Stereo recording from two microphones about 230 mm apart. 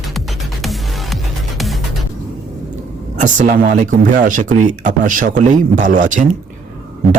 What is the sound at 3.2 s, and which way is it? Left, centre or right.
Speech, right.